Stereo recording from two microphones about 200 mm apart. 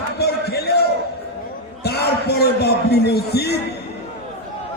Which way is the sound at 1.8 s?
55° left (ahead or behind).